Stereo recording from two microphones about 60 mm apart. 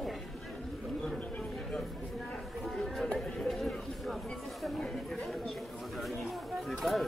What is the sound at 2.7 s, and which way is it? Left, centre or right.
Chatter, centre.